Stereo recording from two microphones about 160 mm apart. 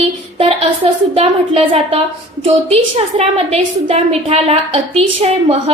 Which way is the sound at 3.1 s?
40° right (ahead or behind).